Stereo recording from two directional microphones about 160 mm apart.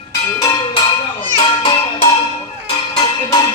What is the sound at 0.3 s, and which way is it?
Speech, 25° left (ahead or behind).